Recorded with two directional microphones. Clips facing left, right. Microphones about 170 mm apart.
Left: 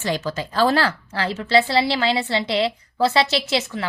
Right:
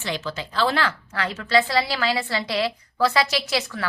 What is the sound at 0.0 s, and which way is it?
A woman's voice, 40° left (ahead or behind).